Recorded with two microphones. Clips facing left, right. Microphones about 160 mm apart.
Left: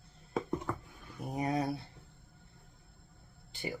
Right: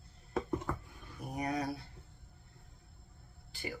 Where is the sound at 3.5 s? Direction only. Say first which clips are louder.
Left 3 dB; 20° left (ahead or behind).